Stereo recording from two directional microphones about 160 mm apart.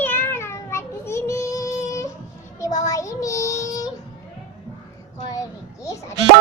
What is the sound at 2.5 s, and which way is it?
Child singing, 20° left (ahead or behind).